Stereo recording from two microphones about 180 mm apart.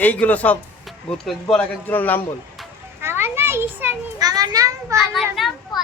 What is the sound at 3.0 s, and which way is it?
Children playing, 15° right (ahead or behind).